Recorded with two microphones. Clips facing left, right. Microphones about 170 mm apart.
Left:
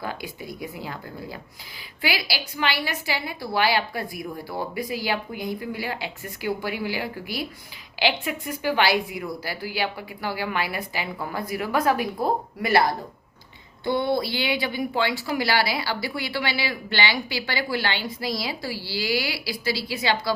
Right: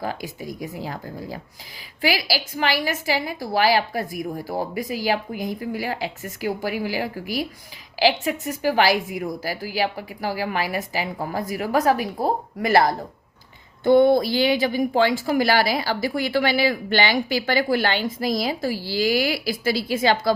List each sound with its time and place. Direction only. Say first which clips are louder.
0.0 s a woman's voice: right 3 dB; 40° right (ahead or behind)
13.8 s a woman's voice: right 8 dB; 50° right (ahead or behind)